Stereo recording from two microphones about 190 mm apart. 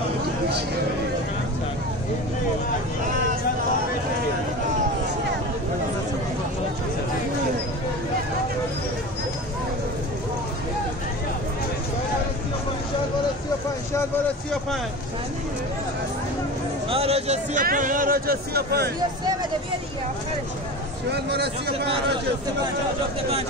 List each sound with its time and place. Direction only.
16.9 s a man's voice: 30° right (ahead or behind)
17.6 s speech: 45° right (ahead or behind)
21.1 s speech: 60° right (ahead or behind)